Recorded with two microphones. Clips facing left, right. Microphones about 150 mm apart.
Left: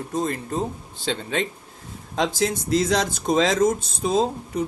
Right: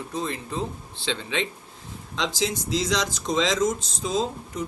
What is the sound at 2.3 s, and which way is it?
Speech, 55° left (ahead or behind).